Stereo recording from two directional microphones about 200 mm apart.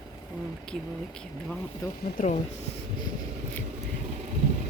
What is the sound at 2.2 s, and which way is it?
Speech, 45° left (ahead or behind).